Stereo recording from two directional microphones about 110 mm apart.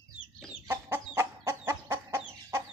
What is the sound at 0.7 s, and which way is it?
Chicken, 20° right (ahead or behind).